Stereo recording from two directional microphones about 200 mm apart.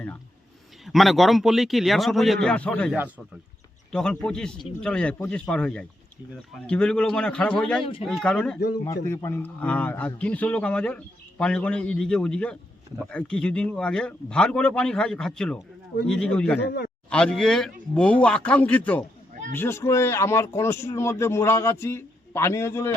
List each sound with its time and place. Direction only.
0.9 s speech: centre (ahead or behind)
7.8 s speech: 25° left (ahead or behind)
8.0 s speech: 5° left (ahead or behind)
16.6 s a man's voice: 55° left (ahead or behind)
17.1 s speech: 5° left (ahead or behind)